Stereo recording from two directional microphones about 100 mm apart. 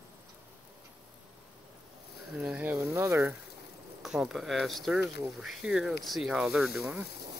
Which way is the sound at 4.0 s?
5° right (ahead or behind).